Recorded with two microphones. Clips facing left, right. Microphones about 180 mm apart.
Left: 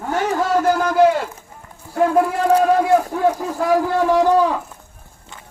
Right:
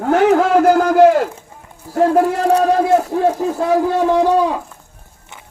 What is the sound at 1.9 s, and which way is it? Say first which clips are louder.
A man's voice: right 3 dB; 35° right (ahead or behind).